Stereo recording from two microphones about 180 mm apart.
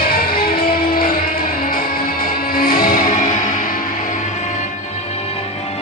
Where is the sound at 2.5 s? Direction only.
55° left (ahead or behind).